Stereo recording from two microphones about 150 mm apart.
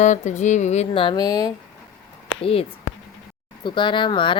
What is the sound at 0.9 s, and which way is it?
Speech, 30° left (ahead or behind).